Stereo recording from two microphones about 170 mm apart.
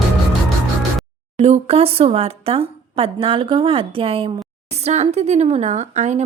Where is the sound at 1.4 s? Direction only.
35° right (ahead or behind).